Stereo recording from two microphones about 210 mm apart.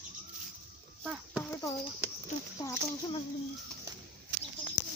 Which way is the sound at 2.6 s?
20° left (ahead or behind).